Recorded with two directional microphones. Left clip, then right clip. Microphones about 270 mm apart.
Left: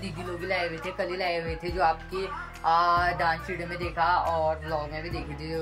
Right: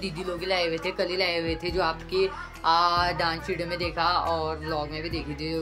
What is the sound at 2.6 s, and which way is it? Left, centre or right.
Speech, centre.